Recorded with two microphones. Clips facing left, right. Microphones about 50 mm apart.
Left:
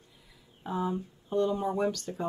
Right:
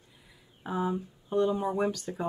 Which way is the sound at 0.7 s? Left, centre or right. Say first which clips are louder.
Right 1 dB; centre.